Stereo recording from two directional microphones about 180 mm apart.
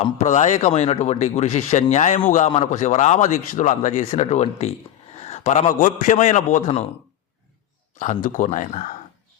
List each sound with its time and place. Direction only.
0.0 s speech: 40° left (ahead or behind)
7.9 s speech: 45° left (ahead or behind)